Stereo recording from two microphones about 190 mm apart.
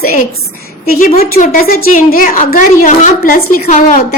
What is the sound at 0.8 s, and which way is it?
A woman's voice, 50° left (ahead or behind).